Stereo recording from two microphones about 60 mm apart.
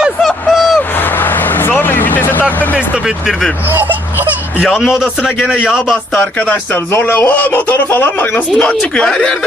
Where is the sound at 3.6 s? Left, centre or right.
Right.